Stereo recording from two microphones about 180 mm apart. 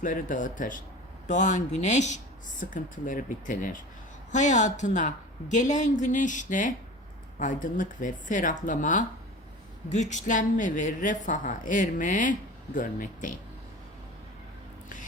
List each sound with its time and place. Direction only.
0.0 s speech: 45° left (ahead or behind)